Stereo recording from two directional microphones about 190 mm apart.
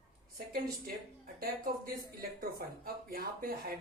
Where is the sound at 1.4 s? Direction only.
50° right (ahead or behind).